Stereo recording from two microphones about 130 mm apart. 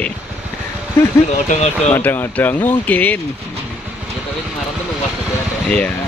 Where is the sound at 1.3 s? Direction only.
65° left (ahead or behind).